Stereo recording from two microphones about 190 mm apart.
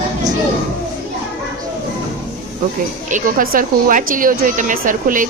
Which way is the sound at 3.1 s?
45° right (ahead or behind).